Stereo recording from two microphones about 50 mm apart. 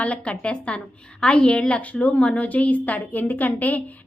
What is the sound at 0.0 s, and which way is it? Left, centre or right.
A woman's voice, left.